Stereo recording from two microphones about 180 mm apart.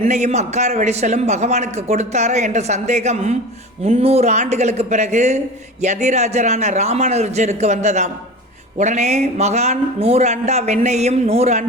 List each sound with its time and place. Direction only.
0.0 s a man's voice: 40° right (ahead or behind)